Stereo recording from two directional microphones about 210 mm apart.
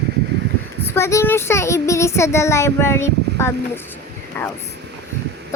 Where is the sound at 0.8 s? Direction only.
10° left (ahead or behind).